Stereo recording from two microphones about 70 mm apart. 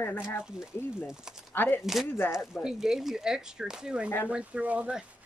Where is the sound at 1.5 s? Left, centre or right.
Left.